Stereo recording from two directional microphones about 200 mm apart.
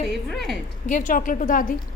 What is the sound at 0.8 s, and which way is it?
Speech, 40° left (ahead or behind).